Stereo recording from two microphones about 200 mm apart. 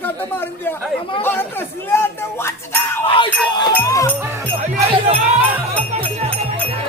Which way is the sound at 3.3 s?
10° left (ahead or behind).